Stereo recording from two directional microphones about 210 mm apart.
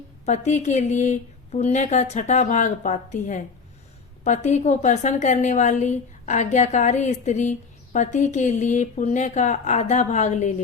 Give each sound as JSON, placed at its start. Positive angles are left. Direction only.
{"t": 0.3, "sound": "a woman's voice", "side_deg": 35}